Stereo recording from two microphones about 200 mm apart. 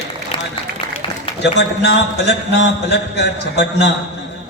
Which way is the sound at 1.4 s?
60° left (ahead or behind).